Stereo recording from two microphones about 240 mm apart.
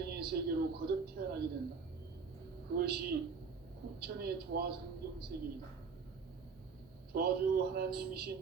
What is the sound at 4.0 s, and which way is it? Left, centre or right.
Speech, right.